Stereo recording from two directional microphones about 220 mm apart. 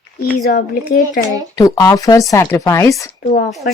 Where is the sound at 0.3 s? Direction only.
40° left (ahead or behind).